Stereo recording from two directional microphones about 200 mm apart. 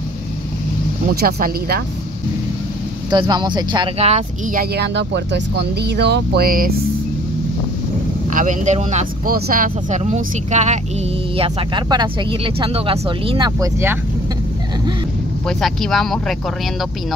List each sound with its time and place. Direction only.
1.2 s speech: 50° right (ahead or behind)
3.1 s speech: 20° right (ahead or behind); by 6.7 s 45° right (ahead or behind)
8.3 s speech: 40° right (ahead or behind); by 13.7 s 25° right (ahead or behind)
15.4 s speech: centre (ahead or behind)